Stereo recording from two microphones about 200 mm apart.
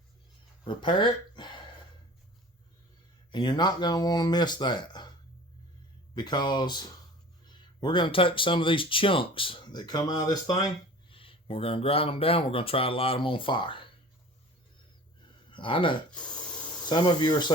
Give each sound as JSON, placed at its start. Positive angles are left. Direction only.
{"t": 0.6, "sound": "speech", "side_deg": 25}
{"t": 3.3, "sound": "speech", "side_deg": 20}
{"t": 6.1, "sound": "speech", "side_deg": 20}
{"t": 15.4, "sound": "speech", "side_deg": 25}
{"t": 16.1, "sound": "spray", "side_deg": 5}
{"t": 16.8, "sound": "speech", "side_deg": 20}